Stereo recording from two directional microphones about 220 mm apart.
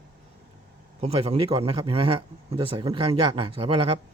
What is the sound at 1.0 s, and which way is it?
A man's voice, 25° right (ahead or behind).